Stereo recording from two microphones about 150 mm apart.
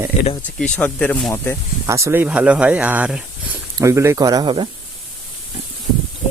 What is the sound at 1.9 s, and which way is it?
Speech, 20° right (ahead or behind).